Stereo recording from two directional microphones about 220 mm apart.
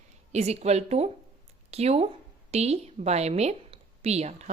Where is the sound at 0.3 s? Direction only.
30° right (ahead or behind).